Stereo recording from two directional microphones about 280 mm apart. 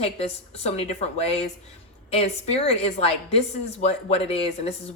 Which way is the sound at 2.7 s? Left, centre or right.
Left.